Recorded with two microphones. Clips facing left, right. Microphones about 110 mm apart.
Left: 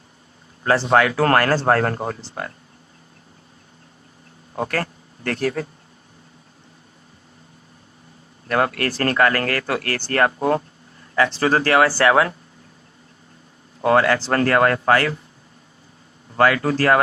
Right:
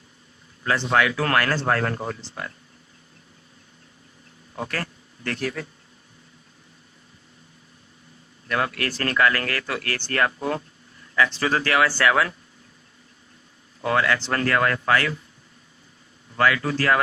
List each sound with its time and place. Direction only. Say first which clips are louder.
0.6 s speech: left 5 dB; 35° left (ahead or behind)
4.5 s speech: left 6 dB; 40° left (ahead or behind)
8.4 s speech: left 5 dB; 40° left (ahead or behind)
13.8 s speech: left 6 dB; 40° left (ahead or behind)
16.3 s speech: left 4 dB; 35° left (ahead or behind)